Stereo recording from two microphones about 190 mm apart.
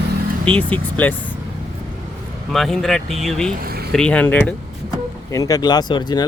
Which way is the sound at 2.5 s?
Centre (ahead or behind).